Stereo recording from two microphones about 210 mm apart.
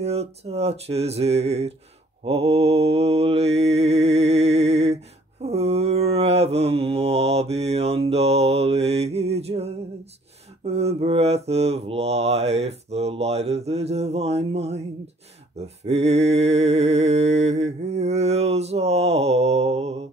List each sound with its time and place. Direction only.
0.0 s mantra: 30° right (ahead or behind)
10.7 s mantra: 30° right (ahead or behind)
15.8 s mantra: 30° right (ahead or behind)